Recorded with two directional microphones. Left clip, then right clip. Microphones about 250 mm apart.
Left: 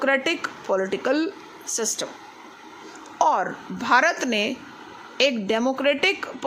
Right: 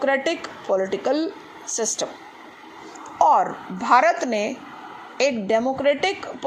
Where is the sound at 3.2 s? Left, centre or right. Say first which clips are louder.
Right 4 dB; centre.